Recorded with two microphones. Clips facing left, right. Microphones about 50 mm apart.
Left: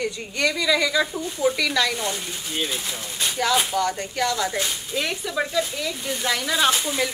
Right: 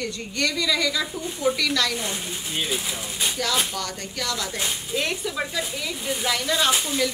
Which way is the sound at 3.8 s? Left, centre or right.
Centre.